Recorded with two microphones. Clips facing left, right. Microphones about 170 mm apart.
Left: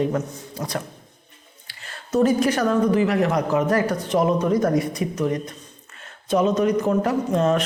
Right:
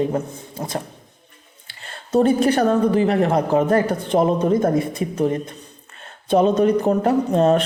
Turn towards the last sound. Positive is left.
turn(degrees=-30)  # may be behind; listen again after turning